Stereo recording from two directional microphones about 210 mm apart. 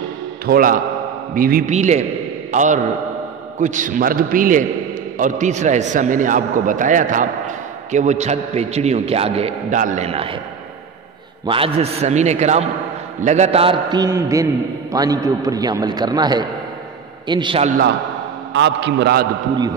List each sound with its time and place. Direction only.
0.5 s a man's voice: 40° right (ahead or behind)
11.4 s a man's voice: 25° right (ahead or behind)
18.5 s a man's voice: 55° right (ahead or behind)